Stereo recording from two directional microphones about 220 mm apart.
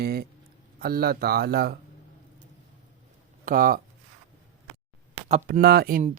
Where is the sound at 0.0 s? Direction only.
45° right (ahead or behind).